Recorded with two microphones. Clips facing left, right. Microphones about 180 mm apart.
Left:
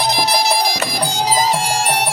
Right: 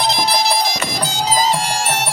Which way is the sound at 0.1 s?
15° left (ahead or behind).